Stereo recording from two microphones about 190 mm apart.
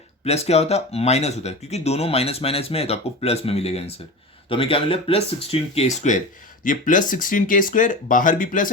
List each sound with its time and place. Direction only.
0.3 s speech: 35° left (ahead or behind)